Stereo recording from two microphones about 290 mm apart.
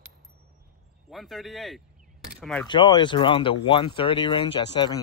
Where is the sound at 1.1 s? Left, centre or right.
Centre.